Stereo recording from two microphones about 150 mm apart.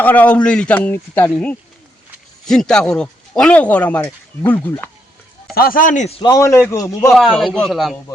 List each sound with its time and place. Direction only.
0.0 s speech: 10° left (ahead or behind)
2.5 s speech: 5° left (ahead or behind)
5.5 s speech: 75° left (ahead or behind); by 6.2 s 45° left (ahead or behind)
6.2 s a man's voice: 25° left (ahead or behind)
7.1 s a man's voice: centre (ahead or behind)